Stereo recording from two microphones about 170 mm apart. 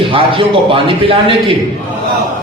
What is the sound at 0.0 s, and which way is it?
A man's voice, 30° right (ahead or behind).